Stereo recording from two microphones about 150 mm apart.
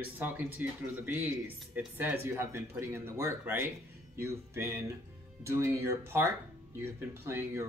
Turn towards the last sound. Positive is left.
turn(degrees=-15)  # may be behind; listen again after turning